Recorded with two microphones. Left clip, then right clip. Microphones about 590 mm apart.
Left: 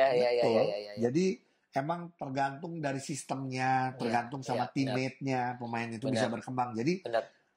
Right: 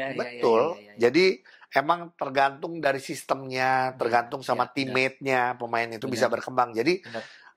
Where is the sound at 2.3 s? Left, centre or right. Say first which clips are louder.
Right 9 dB; right.